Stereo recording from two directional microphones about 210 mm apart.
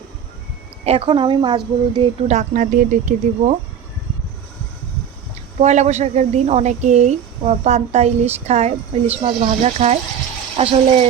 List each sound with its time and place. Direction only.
0.9 s a woman's voice: 25° right (ahead or behind)
2.2 s speech: 35° right (ahead or behind)
5.5 s a woman's voice: 35° right (ahead or behind)